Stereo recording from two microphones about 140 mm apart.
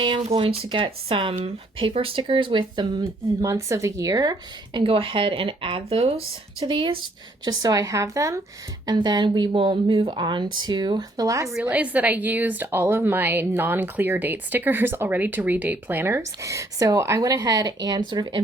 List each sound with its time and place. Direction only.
0.0 s speech: 40° right (ahead or behind)
3.4 s speech: 20° right (ahead or behind); by 7.0 s 40° right (ahead or behind)
7.4 s a woman's voice: 25° right (ahead or behind)
11.6 s a woman's voice: 10° right (ahead or behind); by 18.3 s 30° right (ahead or behind)